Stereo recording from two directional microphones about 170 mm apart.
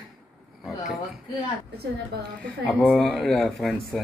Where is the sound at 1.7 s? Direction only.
70° right (ahead or behind).